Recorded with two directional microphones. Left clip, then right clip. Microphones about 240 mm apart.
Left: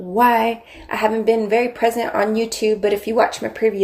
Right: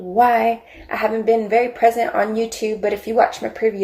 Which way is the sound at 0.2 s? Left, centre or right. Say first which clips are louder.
Right 1 dB; left.